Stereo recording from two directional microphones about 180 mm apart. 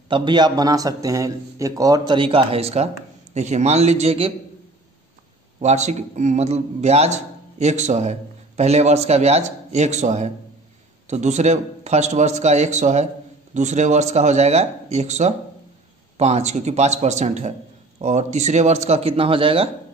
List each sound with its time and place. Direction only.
0.1 s a man's voice: 25° right (ahead or behind)
5.6 s a man's voice: 40° right (ahead or behind)